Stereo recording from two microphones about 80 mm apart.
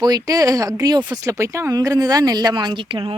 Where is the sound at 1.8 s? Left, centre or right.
Right.